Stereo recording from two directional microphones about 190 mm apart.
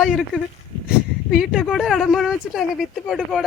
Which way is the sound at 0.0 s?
Centre (ahead or behind).